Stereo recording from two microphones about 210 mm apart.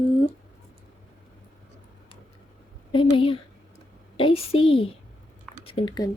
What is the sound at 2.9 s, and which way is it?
Speech, 25° left (ahead or behind).